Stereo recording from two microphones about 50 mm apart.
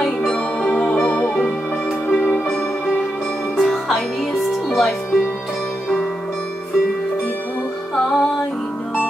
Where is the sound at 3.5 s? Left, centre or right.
Centre.